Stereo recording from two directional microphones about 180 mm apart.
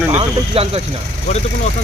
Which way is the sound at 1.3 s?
40° left (ahead or behind).